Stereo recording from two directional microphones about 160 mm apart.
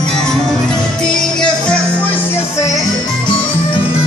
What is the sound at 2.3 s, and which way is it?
Music, 20° left (ahead or behind).